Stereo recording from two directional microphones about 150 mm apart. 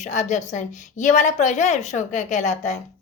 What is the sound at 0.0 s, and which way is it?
A woman's voice, 50° left (ahead or behind).